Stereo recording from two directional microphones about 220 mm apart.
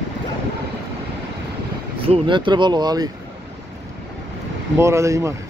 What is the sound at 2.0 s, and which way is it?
Speech, 25° right (ahead or behind).